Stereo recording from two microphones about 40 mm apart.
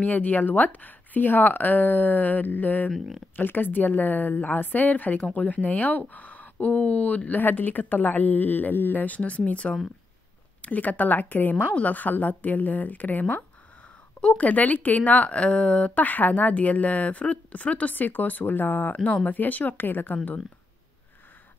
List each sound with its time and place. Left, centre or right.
0.0 s a woman's voice: left
3.0 s speech: centre
3.3 s a woman's voice: left
11.5 s a woman's voice: left
14.4 s a woman's voice: left